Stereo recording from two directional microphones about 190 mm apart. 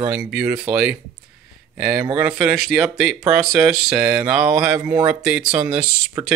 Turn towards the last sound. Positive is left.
turn(degrees=-5)  # may be behind; listen again after turning